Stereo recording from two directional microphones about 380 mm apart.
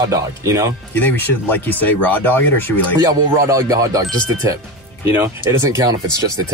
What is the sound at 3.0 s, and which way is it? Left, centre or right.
Speech, centre.